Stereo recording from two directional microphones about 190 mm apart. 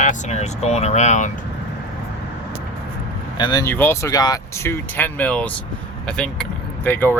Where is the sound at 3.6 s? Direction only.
10° left (ahead or behind).